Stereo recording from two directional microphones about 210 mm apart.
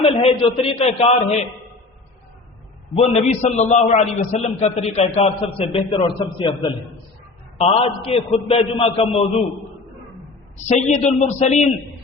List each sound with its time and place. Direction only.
0.0 s a man's voice: 30° left (ahead or behind)
2.9 s a man's voice: 30° left (ahead or behind)
10.7 s a man's voice: 35° left (ahead or behind)